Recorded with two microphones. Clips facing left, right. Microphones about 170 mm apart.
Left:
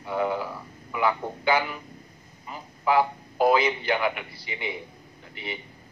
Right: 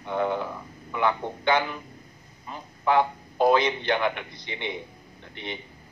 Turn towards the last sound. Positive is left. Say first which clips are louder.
# even
turn(degrees=5)  # may be behind; listen again after turning